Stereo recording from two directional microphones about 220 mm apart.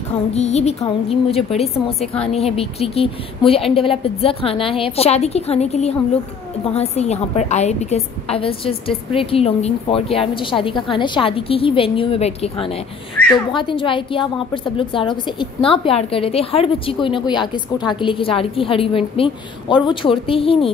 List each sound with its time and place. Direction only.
0.3 s a woman's voice: 30° left (ahead or behind)